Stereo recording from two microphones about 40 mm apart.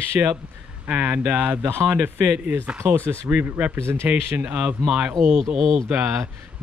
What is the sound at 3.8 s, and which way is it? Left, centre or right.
Speech, right.